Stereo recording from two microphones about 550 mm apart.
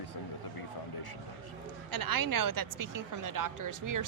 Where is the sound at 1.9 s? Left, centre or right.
Right.